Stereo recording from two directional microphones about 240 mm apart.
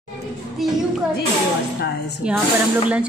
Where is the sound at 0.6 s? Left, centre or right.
Centre.